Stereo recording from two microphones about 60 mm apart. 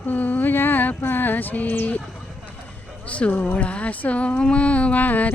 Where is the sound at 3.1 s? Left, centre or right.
Left.